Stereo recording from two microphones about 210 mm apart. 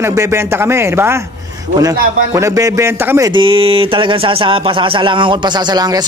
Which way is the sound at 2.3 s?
15° right (ahead or behind).